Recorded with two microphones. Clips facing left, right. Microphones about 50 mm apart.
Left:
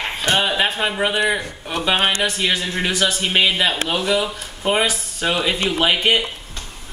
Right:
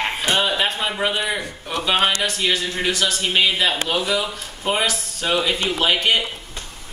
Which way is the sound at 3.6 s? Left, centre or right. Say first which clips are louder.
Left 1 dB; centre.